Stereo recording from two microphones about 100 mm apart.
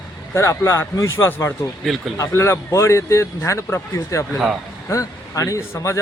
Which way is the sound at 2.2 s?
25° left (ahead or behind).